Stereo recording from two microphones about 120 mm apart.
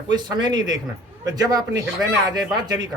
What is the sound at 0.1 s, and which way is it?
Speech, 35° right (ahead or behind).